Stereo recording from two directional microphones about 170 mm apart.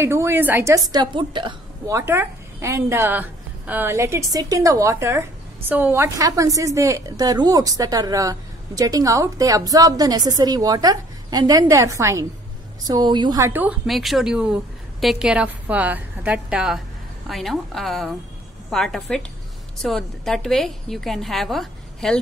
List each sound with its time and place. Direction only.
0.0 s a woman's voice: 15° right (ahead or behind)
0.9 s a woman's voice: 30° right (ahead or behind)
2.0 s a woman's voice: 15° right (ahead or behind)
13.5 s a woman's voice: 10° right (ahead or behind)